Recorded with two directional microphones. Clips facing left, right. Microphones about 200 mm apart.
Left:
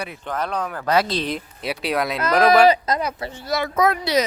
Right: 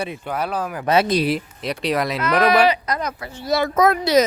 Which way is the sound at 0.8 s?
20° right (ahead or behind).